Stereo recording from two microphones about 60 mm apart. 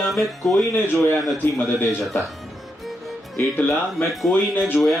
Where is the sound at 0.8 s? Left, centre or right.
Left.